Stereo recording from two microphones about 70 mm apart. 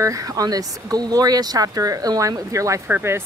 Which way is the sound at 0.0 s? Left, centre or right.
Right.